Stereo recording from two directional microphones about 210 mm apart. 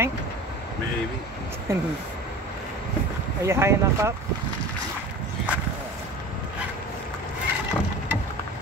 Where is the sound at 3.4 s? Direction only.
10° right (ahead or behind).